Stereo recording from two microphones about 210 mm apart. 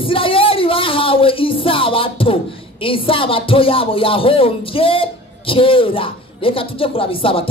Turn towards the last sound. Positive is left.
turn(degrees=25)  # may be behind; listen again after turning